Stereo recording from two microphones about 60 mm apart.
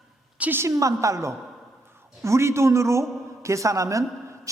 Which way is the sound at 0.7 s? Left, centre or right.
Right.